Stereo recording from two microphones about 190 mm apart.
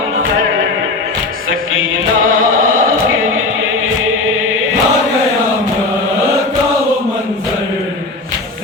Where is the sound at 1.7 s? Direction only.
90° right.